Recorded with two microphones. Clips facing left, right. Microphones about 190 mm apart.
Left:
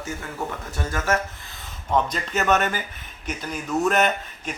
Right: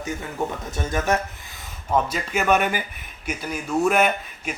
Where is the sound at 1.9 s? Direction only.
10° right (ahead or behind).